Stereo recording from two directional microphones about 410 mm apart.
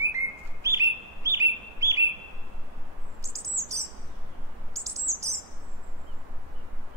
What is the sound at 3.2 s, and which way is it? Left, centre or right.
Chirp, centre.